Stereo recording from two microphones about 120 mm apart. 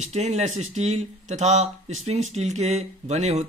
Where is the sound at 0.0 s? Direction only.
70° right (ahead or behind).